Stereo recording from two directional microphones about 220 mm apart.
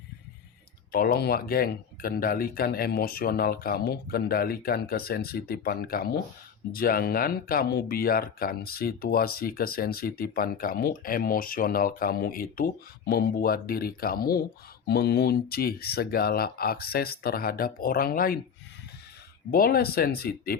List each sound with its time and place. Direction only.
0.9 s speech: 45° left (ahead or behind)
19.5 s speech: 40° left (ahead or behind)